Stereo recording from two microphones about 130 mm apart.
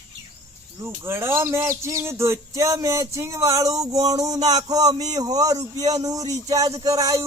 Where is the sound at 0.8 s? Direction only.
20° right (ahead or behind).